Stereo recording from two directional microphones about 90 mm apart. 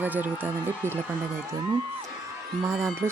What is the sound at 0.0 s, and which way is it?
Speech, 20° right (ahead or behind).